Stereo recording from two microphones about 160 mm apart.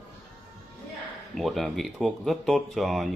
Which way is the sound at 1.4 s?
Centre (ahead or behind).